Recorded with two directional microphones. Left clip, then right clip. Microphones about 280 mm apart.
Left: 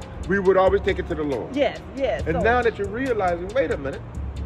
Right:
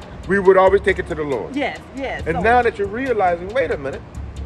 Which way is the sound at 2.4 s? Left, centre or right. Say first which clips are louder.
Right 6 dB; right.